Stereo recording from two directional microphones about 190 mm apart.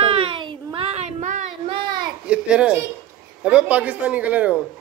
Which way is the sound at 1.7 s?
25° right (ahead or behind).